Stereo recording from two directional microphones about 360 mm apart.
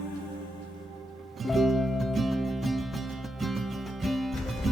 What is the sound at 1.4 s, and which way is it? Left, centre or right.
Music, centre.